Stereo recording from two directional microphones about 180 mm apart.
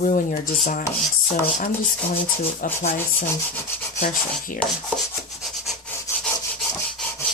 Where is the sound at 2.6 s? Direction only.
50° left (ahead or behind).